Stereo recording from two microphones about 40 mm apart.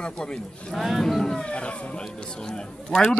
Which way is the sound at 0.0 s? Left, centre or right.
Left.